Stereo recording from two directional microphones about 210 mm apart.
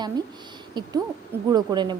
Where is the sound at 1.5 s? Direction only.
20° right (ahead or behind).